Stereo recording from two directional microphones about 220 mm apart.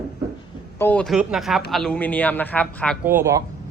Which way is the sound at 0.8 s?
5° left (ahead or behind).